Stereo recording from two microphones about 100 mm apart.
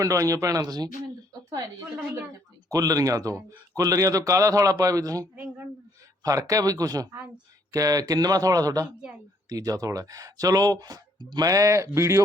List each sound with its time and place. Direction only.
0.0 s speech: 35° right (ahead or behind)
2.6 s speech: 35° right (ahead or behind)